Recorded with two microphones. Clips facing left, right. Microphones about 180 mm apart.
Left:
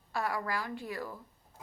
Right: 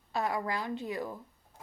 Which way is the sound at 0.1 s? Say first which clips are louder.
Right 2 dB; 20° right (ahead or behind).